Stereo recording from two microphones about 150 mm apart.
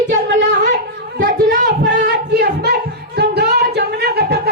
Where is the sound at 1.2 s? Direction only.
65° right (ahead or behind).